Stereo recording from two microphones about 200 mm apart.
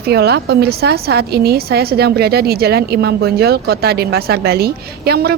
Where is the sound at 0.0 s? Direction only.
55° right (ahead or behind).